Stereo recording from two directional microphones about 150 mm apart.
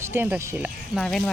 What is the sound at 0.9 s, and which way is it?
Speech, centre (ahead or behind).